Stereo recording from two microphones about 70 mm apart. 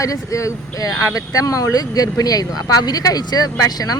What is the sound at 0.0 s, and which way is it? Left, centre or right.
Speech, left.